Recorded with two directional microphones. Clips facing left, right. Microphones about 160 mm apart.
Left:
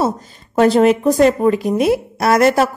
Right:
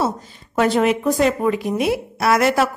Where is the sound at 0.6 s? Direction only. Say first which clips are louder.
Left 5 dB; 40° left (ahead or behind).